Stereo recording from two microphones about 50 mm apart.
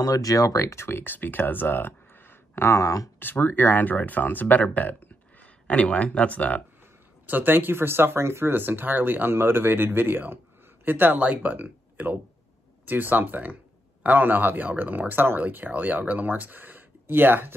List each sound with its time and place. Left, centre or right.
0.6 s speech: left
0.8 s speech: left
7.2 s speech: right